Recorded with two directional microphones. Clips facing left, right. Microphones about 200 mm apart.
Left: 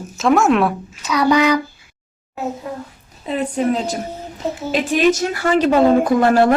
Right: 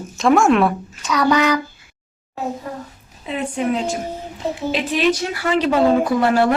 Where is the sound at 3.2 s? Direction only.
40° left (ahead or behind).